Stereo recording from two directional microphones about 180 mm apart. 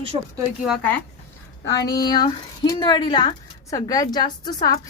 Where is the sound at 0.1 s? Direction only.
30° right (ahead or behind).